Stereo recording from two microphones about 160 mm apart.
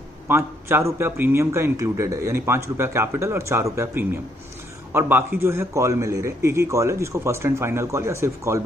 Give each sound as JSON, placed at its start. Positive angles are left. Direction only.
{"t": 0.3, "sound": "a man's voice", "side_deg": -15}